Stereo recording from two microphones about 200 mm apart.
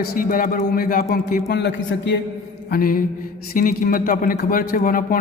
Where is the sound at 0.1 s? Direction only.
45° left (ahead or behind); by 2.1 s 60° left (ahead or behind).